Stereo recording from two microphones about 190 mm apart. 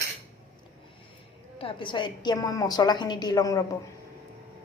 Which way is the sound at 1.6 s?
25° left (ahead or behind).